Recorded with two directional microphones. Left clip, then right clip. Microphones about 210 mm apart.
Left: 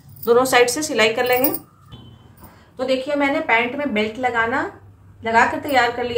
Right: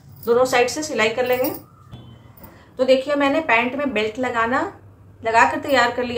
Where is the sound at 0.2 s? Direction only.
35° left (ahead or behind).